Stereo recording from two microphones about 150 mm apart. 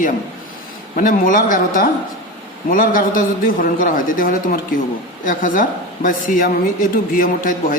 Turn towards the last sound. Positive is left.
turn(degrees=65)  # may be behind; listen again after turning